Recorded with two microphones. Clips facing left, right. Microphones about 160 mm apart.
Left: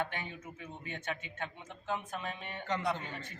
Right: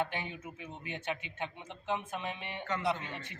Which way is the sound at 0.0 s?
15° right (ahead or behind).